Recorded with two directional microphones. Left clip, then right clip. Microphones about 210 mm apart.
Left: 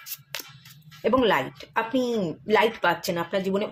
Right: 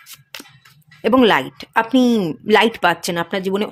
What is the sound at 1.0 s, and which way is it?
Speech, 50° right (ahead or behind).